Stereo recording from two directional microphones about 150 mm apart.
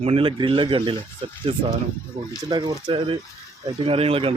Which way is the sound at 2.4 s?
30° right (ahead or behind).